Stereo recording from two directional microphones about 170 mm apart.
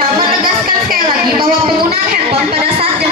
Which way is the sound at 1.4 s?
65° right (ahead or behind).